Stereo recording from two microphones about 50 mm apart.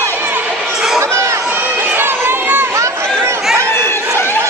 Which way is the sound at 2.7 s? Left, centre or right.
Right.